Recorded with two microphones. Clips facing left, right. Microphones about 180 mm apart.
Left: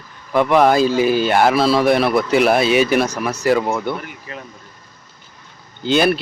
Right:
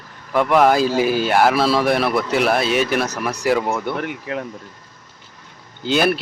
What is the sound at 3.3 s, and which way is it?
Speech, 15° right (ahead or behind).